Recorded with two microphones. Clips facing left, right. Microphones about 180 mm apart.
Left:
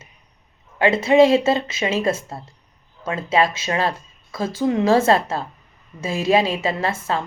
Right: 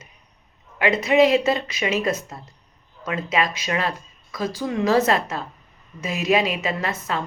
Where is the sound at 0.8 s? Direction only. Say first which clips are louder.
Left 3 dB; 30° left (ahead or behind).